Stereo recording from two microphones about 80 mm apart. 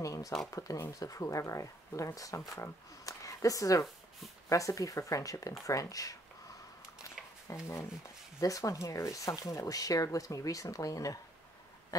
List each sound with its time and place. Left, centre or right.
0.0 s speech: left
7.5 s speech: left